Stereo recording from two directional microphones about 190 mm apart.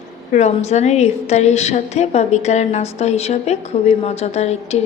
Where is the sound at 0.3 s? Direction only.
35° left (ahead or behind).